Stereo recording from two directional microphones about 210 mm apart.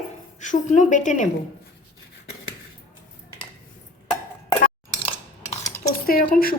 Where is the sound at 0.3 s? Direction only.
35° left (ahead or behind).